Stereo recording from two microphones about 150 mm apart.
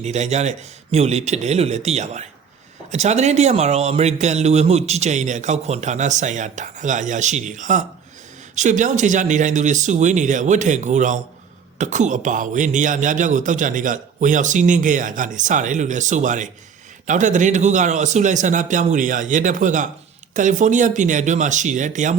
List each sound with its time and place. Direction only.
0.0 s a man's voice: 50° right (ahead or behind)